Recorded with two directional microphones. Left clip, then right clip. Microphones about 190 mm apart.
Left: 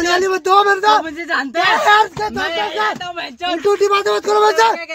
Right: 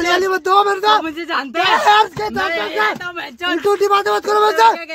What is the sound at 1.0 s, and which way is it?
Speech, 50° right (ahead or behind).